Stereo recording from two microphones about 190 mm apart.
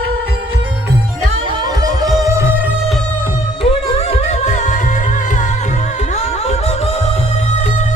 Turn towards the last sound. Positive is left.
turn(degrees=35)  # may be behind; listen again after turning